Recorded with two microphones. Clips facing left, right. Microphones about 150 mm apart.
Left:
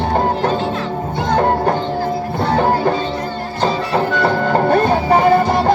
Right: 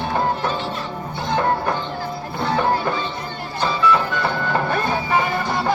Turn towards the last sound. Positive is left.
turn(degrees=40)  # may be behind; listen again after turning